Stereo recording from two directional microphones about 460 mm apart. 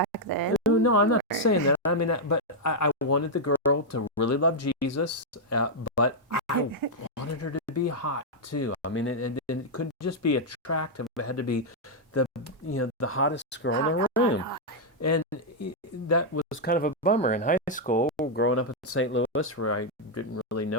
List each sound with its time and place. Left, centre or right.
0.0 s a sound: right
0.8 s a sound: left
1.3 s speech: left
7.2 s speech: left
15.6 s speech: left; by 18.0 s centre
18.3 s speech: left